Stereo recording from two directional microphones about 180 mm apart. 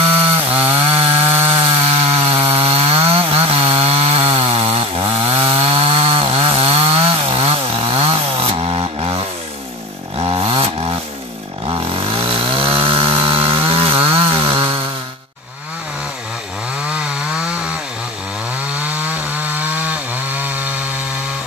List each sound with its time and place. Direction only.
0.4 s chainsaw: 30° right (ahead or behind)
10.2 s chainsaw: 30° right (ahead or behind)
18.8 s chainsaw: 10° right (ahead or behind)